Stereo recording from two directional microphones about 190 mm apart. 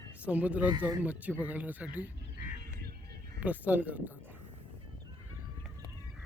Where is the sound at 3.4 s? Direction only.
10° right (ahead or behind).